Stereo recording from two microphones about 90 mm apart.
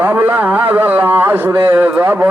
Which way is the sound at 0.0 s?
20° right (ahead or behind).